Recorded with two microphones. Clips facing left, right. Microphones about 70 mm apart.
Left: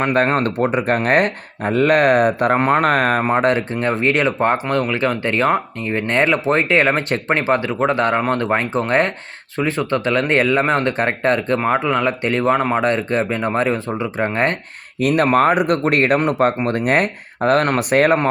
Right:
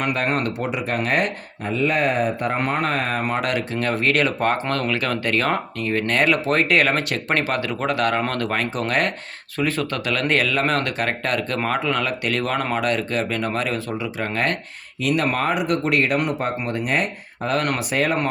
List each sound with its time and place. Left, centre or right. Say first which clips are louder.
0.0 s speech: left 6 dB; left
2.6 s speech: left 7 dB; left
3.2 s speech: left 7 dB; left
15.0 s speech: left 7 dB; left